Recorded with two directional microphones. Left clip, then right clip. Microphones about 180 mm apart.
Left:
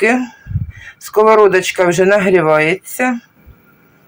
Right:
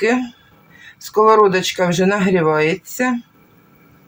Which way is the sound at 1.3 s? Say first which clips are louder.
Left 4 dB; 40° left (ahead or behind).